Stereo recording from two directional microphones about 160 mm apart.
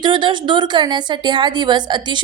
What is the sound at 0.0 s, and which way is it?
A woman's voice, 30° right (ahead or behind).